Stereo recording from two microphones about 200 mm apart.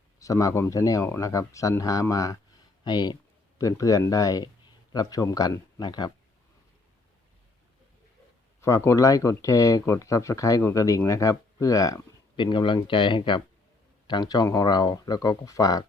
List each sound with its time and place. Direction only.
0.2 s speech: 15° left (ahead or behind)
8.6 s speech: 15° left (ahead or behind)